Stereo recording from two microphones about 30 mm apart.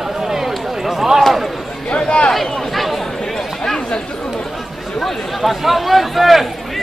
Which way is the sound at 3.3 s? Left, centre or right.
Centre.